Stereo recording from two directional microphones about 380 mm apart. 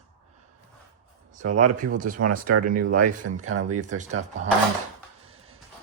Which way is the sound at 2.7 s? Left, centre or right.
Right.